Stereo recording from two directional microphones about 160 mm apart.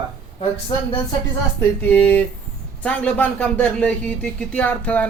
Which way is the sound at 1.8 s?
10° left (ahead or behind).